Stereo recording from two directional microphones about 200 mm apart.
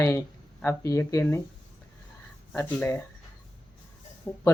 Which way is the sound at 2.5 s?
10° left (ahead or behind).